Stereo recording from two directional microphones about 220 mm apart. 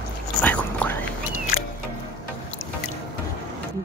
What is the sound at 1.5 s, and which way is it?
Music, 40° left (ahead or behind).